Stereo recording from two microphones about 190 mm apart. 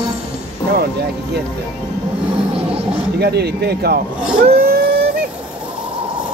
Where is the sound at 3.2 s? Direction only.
55° right (ahead or behind).